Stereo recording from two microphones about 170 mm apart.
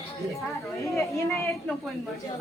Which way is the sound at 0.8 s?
15° left (ahead or behind).